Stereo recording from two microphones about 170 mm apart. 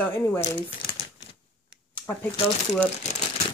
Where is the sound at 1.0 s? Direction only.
30° left (ahead or behind).